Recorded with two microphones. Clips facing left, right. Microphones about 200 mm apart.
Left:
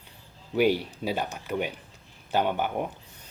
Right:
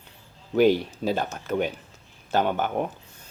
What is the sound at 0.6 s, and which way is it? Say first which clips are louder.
Speech: right 4 dB; 10° left (ahead or behind).